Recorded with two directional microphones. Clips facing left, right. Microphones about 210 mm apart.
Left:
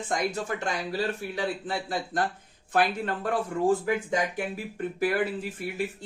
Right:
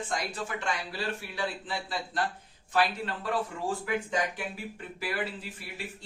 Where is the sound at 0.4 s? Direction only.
40° left (ahead or behind).